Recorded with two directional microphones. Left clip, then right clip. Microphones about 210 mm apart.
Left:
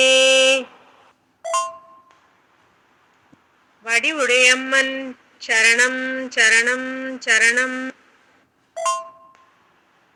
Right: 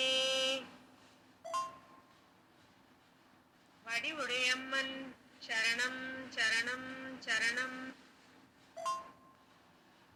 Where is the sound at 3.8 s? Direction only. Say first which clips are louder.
Left 19 dB; 50° left (ahead or behind).